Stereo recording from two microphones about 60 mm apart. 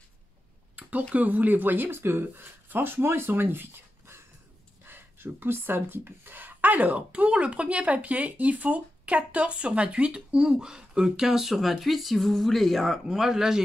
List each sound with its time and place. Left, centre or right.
0.7 s a sound: right
1.1 s speech: right
4.8 s speech: right; by 13.6 s centre